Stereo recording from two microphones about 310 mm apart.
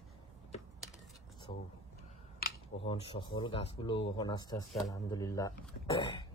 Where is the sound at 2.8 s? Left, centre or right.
Centre.